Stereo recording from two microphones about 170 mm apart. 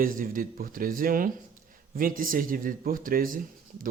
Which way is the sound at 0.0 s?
55° right (ahead or behind).